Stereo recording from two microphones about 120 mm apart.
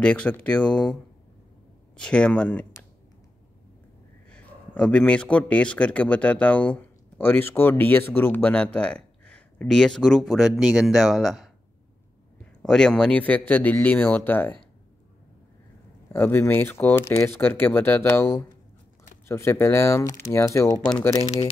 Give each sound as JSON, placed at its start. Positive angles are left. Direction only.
{"t": 0.0, "sound": "speech", "side_deg": 10}
{"t": 2.0, "sound": "speech", "side_deg": 5}
{"t": 4.3, "sound": "a man's voice", "side_deg": 10}
{"t": 12.6, "sound": "speech", "side_deg": 5}
{"t": 16.1, "sound": "speech", "side_deg": 15}